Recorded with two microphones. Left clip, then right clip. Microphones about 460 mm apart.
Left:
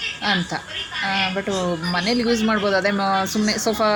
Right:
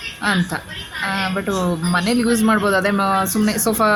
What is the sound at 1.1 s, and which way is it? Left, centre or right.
A man's voice, right.